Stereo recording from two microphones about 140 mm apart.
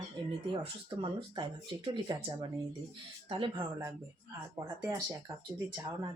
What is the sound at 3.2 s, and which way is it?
Speech, 35° right (ahead or behind).